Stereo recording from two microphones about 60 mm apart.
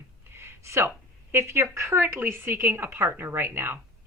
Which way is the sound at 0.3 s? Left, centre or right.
Right.